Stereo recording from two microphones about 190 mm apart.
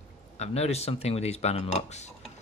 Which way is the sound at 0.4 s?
35° left (ahead or behind).